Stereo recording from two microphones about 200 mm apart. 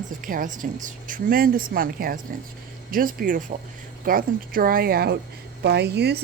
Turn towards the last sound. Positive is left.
turn(degrees=-55)  # may be behind; listen again after turning